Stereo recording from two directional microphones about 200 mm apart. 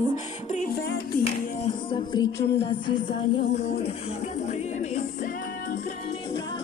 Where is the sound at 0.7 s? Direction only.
55° left (ahead or behind).